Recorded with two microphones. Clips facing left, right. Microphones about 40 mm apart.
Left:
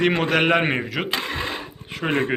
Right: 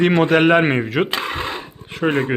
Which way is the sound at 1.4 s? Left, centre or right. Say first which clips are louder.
Right 2 dB; centre.